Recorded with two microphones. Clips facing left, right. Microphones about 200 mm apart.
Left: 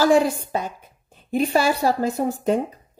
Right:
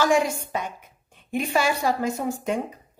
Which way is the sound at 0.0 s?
35° left (ahead or behind).